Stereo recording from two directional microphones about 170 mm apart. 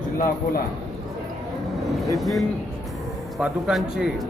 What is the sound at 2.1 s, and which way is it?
Speech, centre (ahead or behind).